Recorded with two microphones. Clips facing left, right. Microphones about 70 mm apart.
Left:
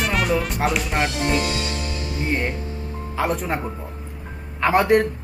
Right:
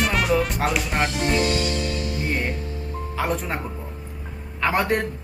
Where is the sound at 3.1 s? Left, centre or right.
Centre.